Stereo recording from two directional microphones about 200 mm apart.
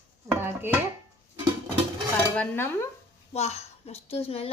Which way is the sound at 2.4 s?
10° left (ahead or behind).